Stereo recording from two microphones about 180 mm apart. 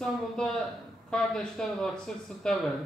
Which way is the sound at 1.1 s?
5° left (ahead or behind).